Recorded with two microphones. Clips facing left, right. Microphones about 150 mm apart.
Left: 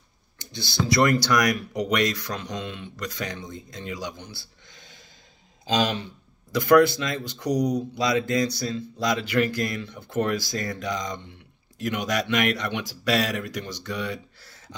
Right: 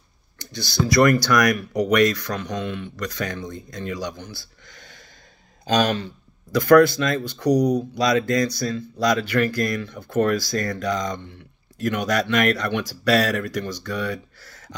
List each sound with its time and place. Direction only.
0.4 s speech: 25° left (ahead or behind)
6.5 s speech: 20° left (ahead or behind)